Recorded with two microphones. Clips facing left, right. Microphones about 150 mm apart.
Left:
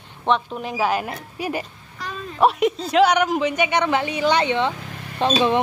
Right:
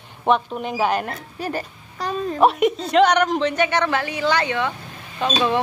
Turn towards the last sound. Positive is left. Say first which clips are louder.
# left 3 dB
turn(degrees=30)  # may be behind; listen again after turning